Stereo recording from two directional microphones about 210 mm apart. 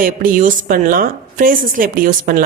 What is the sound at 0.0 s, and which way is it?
A woman's voice, 40° right (ahead or behind).